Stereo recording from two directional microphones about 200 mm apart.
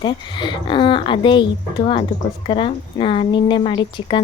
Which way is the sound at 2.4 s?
25° left (ahead or behind).